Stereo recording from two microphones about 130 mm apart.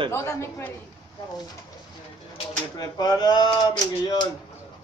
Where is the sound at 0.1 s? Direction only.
20° left (ahead or behind).